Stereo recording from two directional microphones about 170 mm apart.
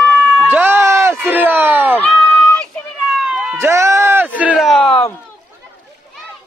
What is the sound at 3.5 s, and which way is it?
Run, 15° right (ahead or behind).